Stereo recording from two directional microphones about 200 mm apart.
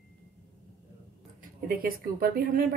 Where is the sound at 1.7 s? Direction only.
45° right (ahead or behind).